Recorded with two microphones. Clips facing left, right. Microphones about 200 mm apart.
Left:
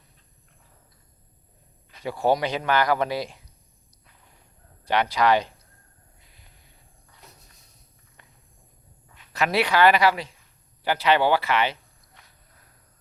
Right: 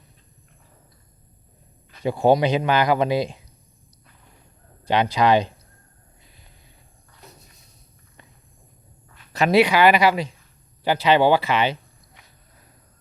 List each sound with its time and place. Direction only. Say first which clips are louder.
2.0 s speech: right 5 dB; 20° right (ahead or behind)
4.9 s speech: right 3 dB; 20° right (ahead or behind)
9.3 s speech: right 6 dB; 25° right (ahead or behind)